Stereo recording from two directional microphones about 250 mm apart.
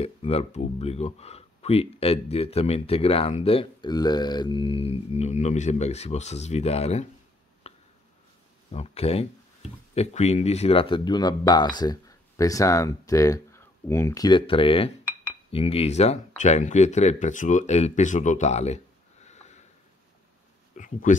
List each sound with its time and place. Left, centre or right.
0.0 s speech: left
7.7 s a sound: left
8.7 s speech: left
19.2 s sniff: left
20.7 s speech: left